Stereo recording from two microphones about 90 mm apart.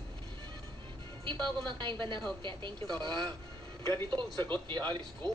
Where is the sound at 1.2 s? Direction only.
60° right (ahead or behind).